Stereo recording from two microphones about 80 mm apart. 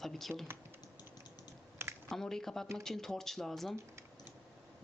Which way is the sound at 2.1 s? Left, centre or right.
Centre.